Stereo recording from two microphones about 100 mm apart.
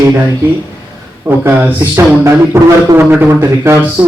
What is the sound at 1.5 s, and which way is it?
Speech, 25° right (ahead or behind).